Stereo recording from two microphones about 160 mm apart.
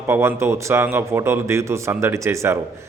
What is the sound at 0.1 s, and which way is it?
A man's voice, 15° right (ahead or behind).